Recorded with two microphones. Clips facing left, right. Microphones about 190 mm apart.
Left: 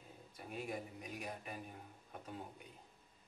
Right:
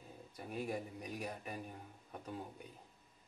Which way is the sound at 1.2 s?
40° right (ahead or behind).